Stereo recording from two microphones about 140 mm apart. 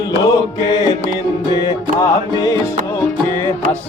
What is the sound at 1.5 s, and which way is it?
Music, 30° left (ahead or behind).